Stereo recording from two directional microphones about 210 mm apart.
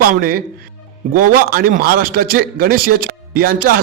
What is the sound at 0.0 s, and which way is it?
A man's voice, 45° right (ahead or behind).